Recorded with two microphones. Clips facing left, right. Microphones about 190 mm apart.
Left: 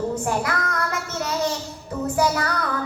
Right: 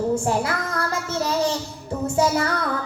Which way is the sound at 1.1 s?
30° right (ahead or behind).